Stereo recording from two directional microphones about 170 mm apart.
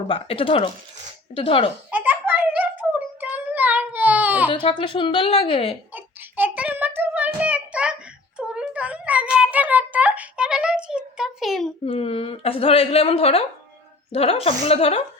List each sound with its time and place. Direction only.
0.1 s a woman's voice: 35° left (ahead or behind)
1.9 s a sound: 10° right (ahead or behind)
4.4 s a woman's voice: 30° left (ahead or behind)
5.9 s child singing: 10° right (ahead or behind)
8.4 s a sound: 5° right (ahead or behind)
11.9 s a woman's voice: 35° left (ahead or behind)